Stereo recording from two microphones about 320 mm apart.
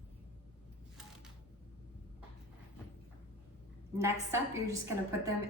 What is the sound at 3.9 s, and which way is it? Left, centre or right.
A woman's voice, centre.